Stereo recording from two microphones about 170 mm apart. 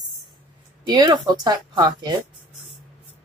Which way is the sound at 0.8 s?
25° right (ahead or behind).